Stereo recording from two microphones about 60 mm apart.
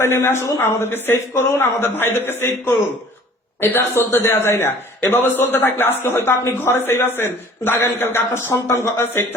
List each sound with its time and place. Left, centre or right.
0.0 s a man's voice: left
3.6 s a man's voice: left